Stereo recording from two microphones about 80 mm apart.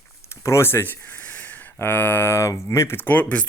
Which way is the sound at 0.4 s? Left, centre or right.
Left.